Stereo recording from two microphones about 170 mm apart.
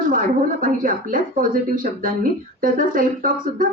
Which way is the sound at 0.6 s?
55° right (ahead or behind).